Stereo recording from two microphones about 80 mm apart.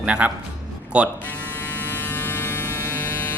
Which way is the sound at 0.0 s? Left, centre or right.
Centre.